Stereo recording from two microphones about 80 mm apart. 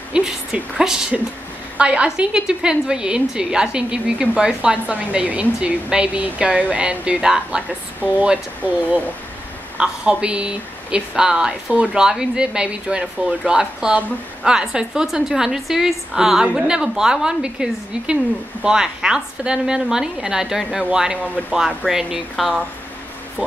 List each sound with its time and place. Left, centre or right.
0.1 s a woman's voice: centre
9.8 s a woman's voice: centre